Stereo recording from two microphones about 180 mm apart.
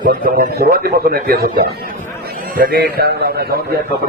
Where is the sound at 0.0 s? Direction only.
50° right (ahead or behind).